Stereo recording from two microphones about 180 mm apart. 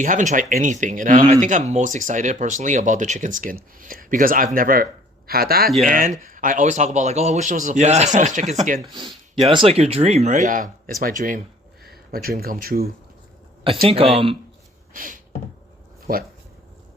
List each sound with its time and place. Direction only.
0.0 s speech: 45° right (ahead or behind)
5.7 s speech: 45° right (ahead or behind)
8.8 s speech: 25° right (ahead or behind); by 12.9 s 55° right (ahead or behind)
13.8 s speech: 35° right (ahead or behind)
14.9 s a sound: 50° right (ahead or behind)